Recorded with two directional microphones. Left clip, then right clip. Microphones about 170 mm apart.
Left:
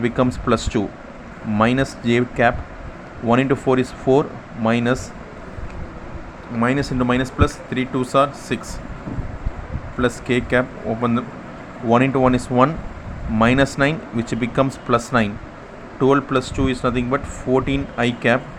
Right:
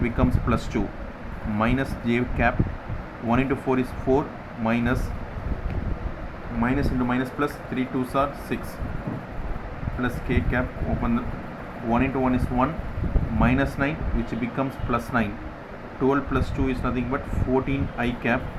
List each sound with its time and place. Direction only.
0.0 s speech: 40° left (ahead or behind)
6.6 s speech: 55° left (ahead or behind)
10.0 s speech: 55° left (ahead or behind)